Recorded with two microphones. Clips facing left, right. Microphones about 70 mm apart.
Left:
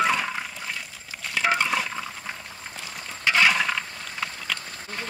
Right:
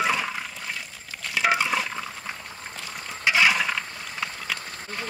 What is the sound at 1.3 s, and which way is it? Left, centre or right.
Stir, centre.